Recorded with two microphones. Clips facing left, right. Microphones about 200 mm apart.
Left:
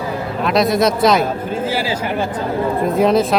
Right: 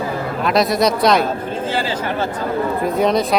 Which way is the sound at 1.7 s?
10° left (ahead or behind).